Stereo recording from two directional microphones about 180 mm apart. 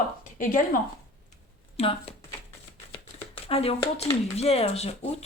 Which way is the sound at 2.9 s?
30° left (ahead or behind).